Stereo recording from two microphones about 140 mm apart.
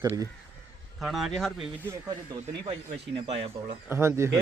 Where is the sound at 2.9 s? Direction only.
45° right (ahead or behind).